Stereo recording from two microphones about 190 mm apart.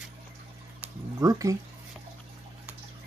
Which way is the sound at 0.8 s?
15° right (ahead or behind).